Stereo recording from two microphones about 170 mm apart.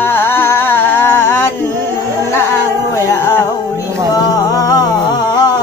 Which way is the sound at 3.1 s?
15° left (ahead or behind).